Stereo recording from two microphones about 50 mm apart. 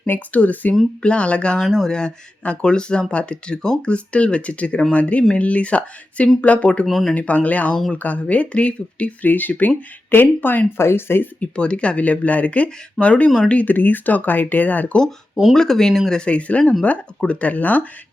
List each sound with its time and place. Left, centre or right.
0.3 s speech: left
1.6 s speech: centre
1.9 s speech: centre
6.8 s speech: centre
7.1 s speech: left
10.8 s speech: left
11.3 s speech: left
15.5 s speech: centre
16.2 s speech: left